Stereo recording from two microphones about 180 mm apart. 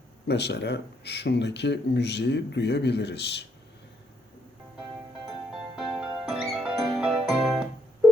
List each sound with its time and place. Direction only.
0.3 s speech: 65° left (ahead or behind)
5.2 s music: centre (ahead or behind)